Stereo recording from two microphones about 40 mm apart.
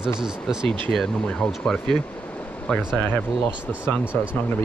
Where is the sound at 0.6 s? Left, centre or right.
Centre.